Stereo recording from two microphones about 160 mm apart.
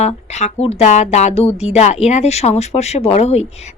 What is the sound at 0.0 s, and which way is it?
A woman's voice, 45° left (ahead or behind).